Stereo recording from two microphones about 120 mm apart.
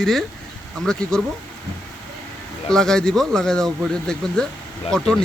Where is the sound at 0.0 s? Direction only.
5° left (ahead or behind).